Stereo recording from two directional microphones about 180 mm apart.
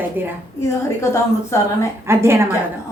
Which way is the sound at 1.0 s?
15° left (ahead or behind).